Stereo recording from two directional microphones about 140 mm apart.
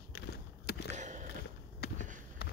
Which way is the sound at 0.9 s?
60° right (ahead or behind).